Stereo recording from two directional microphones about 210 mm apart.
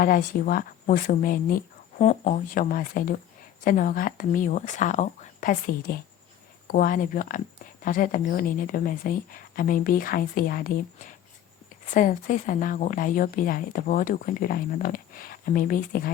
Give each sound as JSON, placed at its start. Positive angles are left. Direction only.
{"t": 0.0, "sound": "speech", "side_deg": 40}